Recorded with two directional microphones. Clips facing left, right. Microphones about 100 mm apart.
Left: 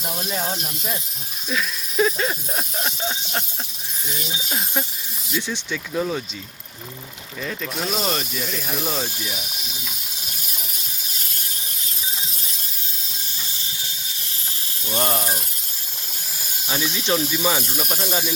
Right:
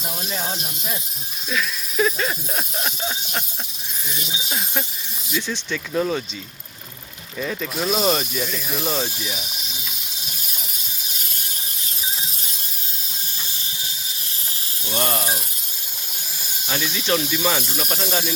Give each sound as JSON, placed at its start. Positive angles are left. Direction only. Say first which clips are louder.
{"t": 0.0, "sound": "speech", "louder": "left 2 dB", "side_deg": 0}
{"t": 1.5, "sound": "speech", "louder": "even", "side_deg": 25}
{"t": 5.5, "sound": "speech", "louder": "right 2 dB", "side_deg": 5}
{"t": 7.9, "sound": "speech", "louder": "right 5 dB", "side_deg": -10}
{"t": 14.8, "sound": "speech", "louder": "left 1 dB", "side_deg": 30}
{"t": 16.6, "sound": "speech", "louder": "even", "side_deg": 5}